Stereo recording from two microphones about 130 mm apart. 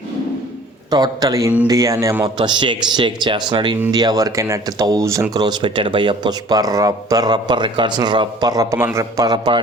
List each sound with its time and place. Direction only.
0.9 s speech: 30° right (ahead or behind)
2.2 s speech: 35° right (ahead or behind)